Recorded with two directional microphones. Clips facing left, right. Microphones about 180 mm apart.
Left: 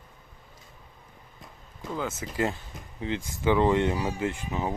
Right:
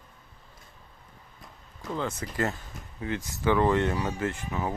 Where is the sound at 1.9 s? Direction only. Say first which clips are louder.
Even; 5° left (ahead or behind).